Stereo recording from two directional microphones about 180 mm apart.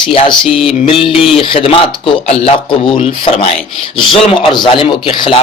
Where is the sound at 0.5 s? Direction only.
30° left (ahead or behind).